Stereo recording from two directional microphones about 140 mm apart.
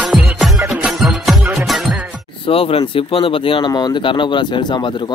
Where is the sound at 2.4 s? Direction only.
40° left (ahead or behind).